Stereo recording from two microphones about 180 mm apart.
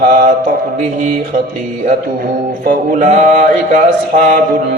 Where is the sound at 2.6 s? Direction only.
45° right (ahead or behind).